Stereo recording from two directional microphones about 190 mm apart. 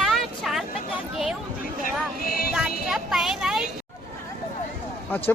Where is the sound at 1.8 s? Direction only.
50° left (ahead or behind).